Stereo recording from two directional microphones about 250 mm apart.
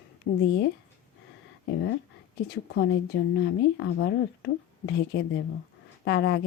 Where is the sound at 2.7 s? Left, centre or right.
Left.